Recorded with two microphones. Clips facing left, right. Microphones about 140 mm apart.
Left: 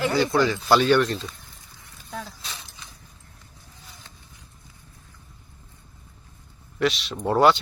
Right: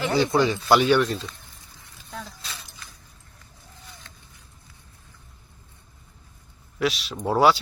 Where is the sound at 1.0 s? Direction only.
Centre (ahead or behind).